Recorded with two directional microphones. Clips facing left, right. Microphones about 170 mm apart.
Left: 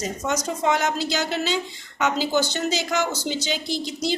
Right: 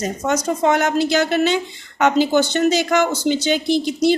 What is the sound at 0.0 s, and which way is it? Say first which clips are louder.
Speech: right 5 dB; 50° right (ahead or behind).